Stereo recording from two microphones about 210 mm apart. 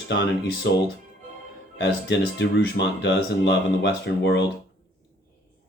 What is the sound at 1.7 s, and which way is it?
Speech, 60° left (ahead or behind).